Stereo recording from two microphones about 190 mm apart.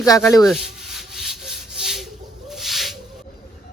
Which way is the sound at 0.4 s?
Centre (ahead or behind).